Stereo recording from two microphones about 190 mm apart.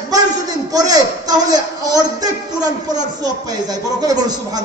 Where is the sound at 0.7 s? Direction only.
20° right (ahead or behind).